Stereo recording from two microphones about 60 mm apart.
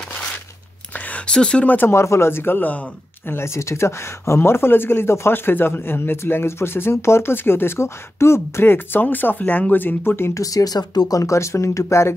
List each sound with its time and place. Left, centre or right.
0.9 s a sound: left
1.2 s speech: centre
1.9 s speech: left
3.3 s speech: left
10.3 s speech: left